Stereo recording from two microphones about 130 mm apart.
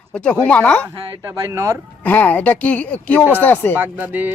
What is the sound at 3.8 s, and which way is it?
Speech, 15° right (ahead or behind).